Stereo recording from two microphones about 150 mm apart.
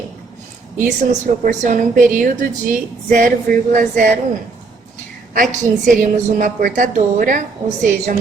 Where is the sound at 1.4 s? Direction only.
60° right (ahead or behind).